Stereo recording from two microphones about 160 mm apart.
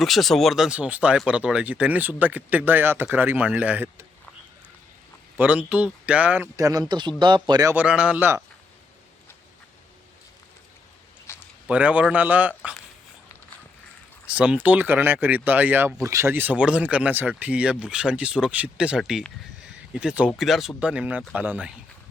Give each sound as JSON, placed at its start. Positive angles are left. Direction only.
{"t": 0.0, "sound": "speech", "side_deg": 0}
{"t": 5.4, "sound": "speech", "side_deg": -10}
{"t": 7.7, "sound": "speech", "side_deg": -10}
{"t": 11.3, "sound": "a sound", "side_deg": 15}
{"t": 11.7, "sound": "speech", "side_deg": -10}
{"t": 14.3, "sound": "speech", "side_deg": -10}